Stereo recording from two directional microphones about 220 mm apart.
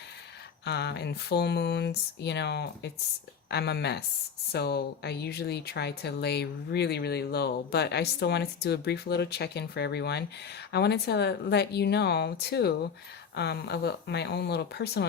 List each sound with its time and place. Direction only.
0.6 s speech: 50° left (ahead or behind)